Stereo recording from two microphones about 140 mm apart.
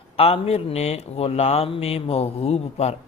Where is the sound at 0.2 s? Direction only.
45° left (ahead or behind).